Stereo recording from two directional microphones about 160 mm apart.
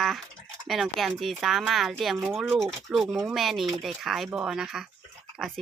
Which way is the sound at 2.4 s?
Centre (ahead or behind).